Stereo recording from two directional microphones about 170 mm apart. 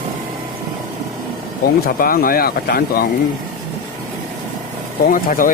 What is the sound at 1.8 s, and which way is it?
Speech, 60° left (ahead or behind).